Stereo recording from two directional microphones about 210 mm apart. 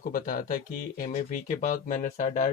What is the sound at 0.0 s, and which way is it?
Speech, 40° left (ahead or behind).